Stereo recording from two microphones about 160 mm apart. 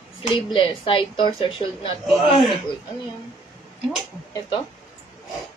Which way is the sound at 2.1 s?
Centre (ahead or behind).